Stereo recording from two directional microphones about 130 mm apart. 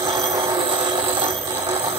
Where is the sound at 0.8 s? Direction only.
40° right (ahead or behind).